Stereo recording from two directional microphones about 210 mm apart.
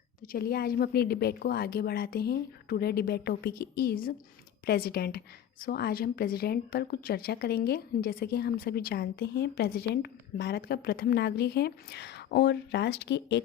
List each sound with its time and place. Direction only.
0.3 s a woman's voice: 45° left (ahead or behind)